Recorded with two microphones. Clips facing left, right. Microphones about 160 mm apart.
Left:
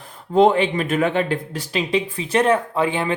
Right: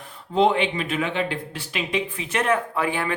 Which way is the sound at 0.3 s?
45° left (ahead or behind).